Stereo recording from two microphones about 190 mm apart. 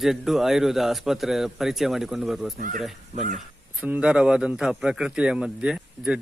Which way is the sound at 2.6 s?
40° right (ahead or behind).